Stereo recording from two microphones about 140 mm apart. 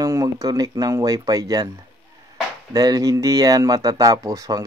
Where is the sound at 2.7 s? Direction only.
25° right (ahead or behind).